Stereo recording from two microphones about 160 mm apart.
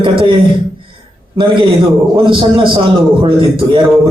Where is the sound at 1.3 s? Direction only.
30° right (ahead or behind).